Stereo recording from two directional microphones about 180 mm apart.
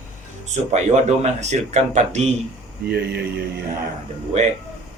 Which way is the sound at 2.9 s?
65° right (ahead or behind).